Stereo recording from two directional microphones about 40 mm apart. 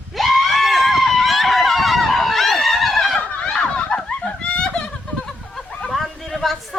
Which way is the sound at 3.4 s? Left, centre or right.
Left.